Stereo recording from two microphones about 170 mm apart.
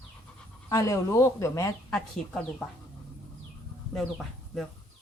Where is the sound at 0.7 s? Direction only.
20° left (ahead or behind).